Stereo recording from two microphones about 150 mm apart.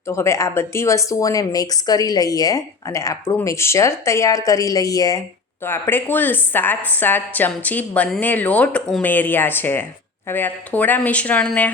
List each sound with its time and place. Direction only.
0.1 s a woman's voice: 20° left (ahead or behind)